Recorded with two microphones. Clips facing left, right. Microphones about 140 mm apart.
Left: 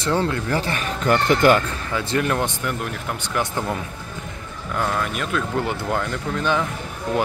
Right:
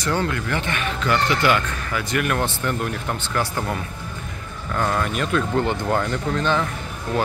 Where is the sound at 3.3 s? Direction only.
20° left (ahead or behind).